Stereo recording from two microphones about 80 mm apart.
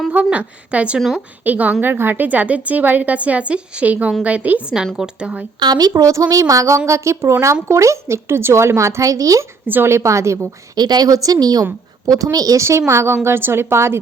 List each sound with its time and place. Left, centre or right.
0.1 s a woman's voice: centre
5.5 s a woman's voice: right
9.6 s a woman's voice: right
10.8 s a woman's voice: right